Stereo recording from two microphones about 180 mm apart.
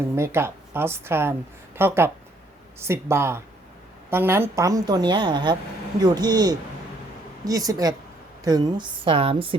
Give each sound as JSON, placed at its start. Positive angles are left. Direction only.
{"t": 0.2, "sound": "a woman's voice", "side_deg": -15}